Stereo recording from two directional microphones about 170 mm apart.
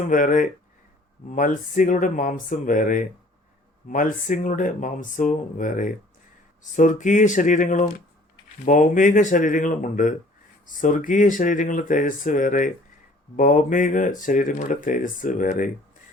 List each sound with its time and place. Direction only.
0.1 s speech: 50° left (ahead or behind)